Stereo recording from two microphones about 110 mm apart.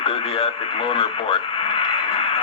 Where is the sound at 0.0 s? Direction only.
60° left (ahead or behind).